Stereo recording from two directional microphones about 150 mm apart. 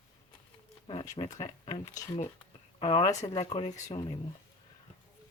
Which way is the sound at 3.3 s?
40° left (ahead or behind).